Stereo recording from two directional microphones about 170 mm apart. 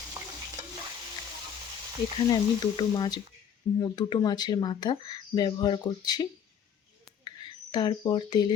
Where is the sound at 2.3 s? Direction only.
25° left (ahead or behind).